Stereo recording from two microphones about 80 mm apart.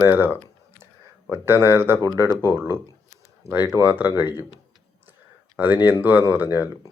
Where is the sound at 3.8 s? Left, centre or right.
Right.